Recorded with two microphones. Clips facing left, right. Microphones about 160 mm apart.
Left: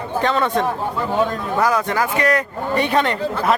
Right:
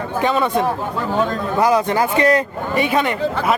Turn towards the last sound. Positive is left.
turn(degrees=-5)  # may be behind; listen again after turning